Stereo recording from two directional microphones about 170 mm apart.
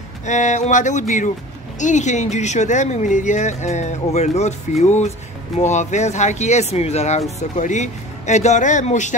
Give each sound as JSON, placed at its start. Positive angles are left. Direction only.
{"t": 0.2, "sound": "speech", "side_deg": 45}